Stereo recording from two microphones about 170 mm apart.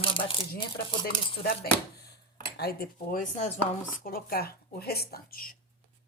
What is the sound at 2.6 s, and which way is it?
Speech, 65° left (ahead or behind).